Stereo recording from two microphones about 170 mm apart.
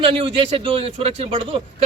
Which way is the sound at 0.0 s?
35° right (ahead or behind).